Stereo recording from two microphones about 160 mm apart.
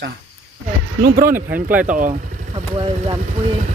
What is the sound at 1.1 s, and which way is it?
Speech, 60° right (ahead or behind).